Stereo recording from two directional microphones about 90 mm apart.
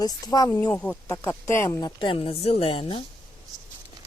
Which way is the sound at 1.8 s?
70° left (ahead or behind).